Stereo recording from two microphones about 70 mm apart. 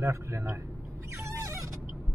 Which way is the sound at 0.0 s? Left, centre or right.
Right.